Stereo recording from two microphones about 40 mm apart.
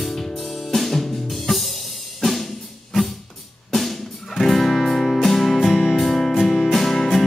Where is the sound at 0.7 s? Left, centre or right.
Centre.